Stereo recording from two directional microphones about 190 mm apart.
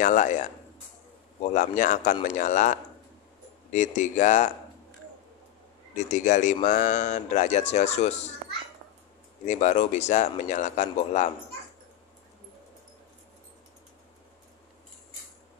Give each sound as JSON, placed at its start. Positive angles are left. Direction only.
{"t": 0.0, "sound": "a man's voice", "side_deg": 40}
{"t": 1.5, "sound": "a man's voice", "side_deg": 40}
{"t": 6.0, "sound": "a man's voice", "side_deg": 40}
{"t": 9.5, "sound": "a man's voice", "side_deg": 40}